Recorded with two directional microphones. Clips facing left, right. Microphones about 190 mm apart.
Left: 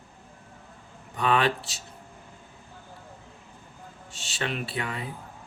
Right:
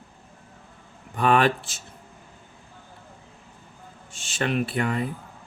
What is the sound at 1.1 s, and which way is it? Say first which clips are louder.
Speech: right 4 dB; 50° right (ahead or behind).